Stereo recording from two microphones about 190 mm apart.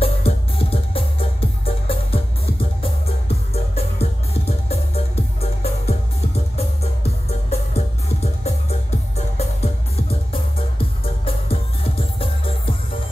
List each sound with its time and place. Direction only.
0.0 s music: 30° left (ahead or behind)